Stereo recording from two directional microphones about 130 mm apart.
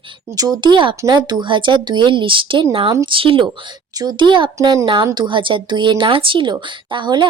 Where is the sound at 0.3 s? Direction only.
30° right (ahead or behind).